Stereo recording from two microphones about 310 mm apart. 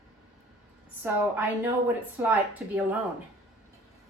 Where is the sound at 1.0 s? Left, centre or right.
Centre.